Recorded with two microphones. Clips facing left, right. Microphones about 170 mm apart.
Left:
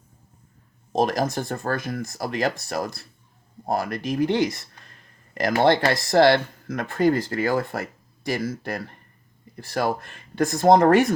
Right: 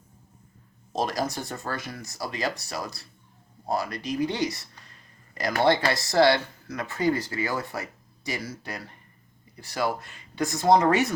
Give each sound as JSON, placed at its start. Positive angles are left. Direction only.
{"t": 0.9, "sound": "speech", "side_deg": 50}